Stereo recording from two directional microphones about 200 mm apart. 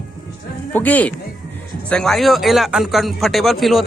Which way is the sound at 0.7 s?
10° left (ahead or behind).